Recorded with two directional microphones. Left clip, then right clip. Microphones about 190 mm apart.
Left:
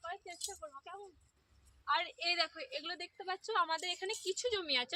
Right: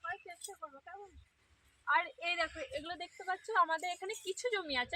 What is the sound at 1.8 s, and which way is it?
Speech, 35° left (ahead or behind).